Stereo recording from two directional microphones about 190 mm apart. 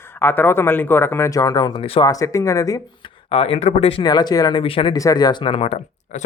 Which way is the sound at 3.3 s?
30° left (ahead or behind).